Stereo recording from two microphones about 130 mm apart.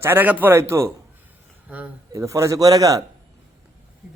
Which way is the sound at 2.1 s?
25° right (ahead or behind).